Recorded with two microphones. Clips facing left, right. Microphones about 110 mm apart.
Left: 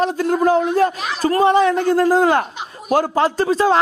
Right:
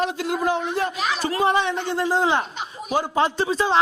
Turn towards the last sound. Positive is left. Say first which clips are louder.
# left 5 dB
turn(degrees=45)  # may be behind; listen again after turning